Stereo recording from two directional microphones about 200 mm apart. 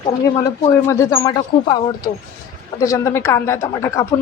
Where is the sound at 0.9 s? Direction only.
15° left (ahead or behind).